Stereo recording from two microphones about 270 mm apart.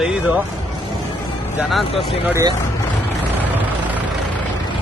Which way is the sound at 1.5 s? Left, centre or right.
Centre.